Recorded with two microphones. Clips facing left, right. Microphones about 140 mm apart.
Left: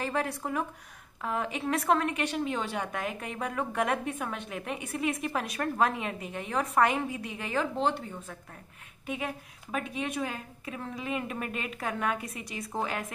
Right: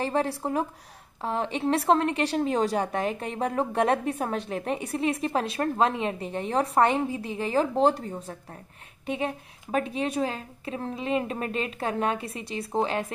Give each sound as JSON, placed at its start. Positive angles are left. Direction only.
{"t": 0.0, "sound": "a woman's voice", "side_deg": -30}